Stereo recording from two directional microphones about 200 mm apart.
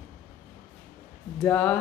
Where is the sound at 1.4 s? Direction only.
5° left (ahead or behind).